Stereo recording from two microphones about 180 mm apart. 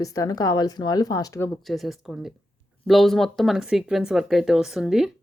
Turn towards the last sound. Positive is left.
turn(degrees=-5)  # may be behind; listen again after turning